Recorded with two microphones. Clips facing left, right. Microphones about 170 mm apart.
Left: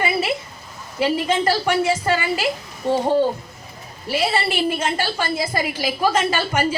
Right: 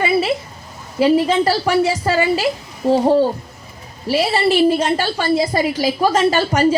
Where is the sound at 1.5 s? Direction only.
35° right (ahead or behind).